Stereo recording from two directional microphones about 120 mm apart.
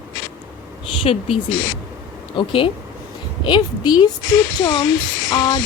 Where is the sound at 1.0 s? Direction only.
50° left (ahead or behind).